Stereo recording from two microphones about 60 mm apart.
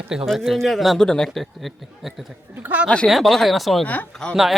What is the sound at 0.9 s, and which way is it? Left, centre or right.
Speech, centre.